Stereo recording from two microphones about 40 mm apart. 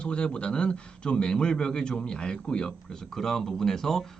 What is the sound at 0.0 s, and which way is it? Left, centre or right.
Speech, left.